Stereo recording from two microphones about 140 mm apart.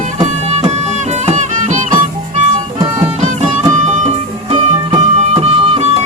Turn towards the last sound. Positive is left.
turn(degrees=-45)  # may be behind; listen again after turning